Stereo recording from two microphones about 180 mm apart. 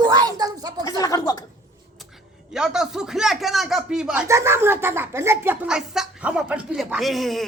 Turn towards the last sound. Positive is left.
turn(degrees=0)  # may be behind; listen again after turning